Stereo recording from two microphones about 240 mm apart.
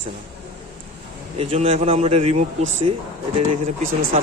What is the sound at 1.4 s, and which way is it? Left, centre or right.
Speech, right.